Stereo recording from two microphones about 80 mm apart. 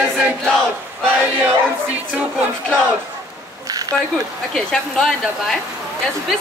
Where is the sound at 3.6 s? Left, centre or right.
Right.